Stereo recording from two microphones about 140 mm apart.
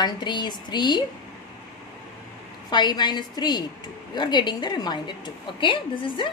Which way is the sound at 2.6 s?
30° left (ahead or behind).